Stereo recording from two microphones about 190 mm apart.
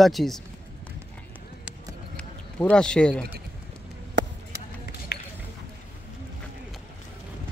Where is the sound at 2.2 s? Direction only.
5° left (ahead or behind).